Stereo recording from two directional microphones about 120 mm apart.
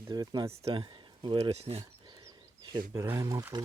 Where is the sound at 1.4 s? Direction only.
55° right (ahead or behind).